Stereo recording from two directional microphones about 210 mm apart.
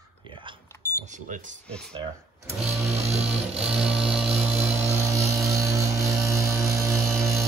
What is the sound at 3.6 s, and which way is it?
Music, centre (ahead or behind).